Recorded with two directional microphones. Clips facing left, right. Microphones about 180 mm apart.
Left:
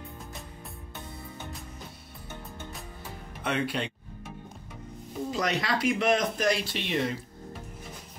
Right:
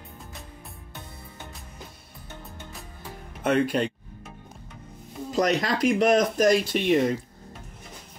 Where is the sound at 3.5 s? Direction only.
45° right (ahead or behind).